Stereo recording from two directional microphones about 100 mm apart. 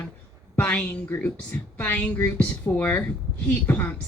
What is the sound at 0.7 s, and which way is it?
A woman's voice, 10° left (ahead or behind).